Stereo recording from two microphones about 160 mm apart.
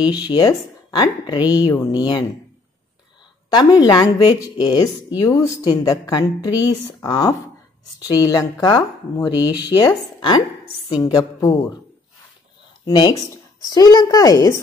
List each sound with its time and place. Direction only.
0.3 s a woman's voice: 25° left (ahead or behind)
3.5 s a woman's voice: 25° left (ahead or behind)
12.8 s a woman's voice: 25° left (ahead or behind)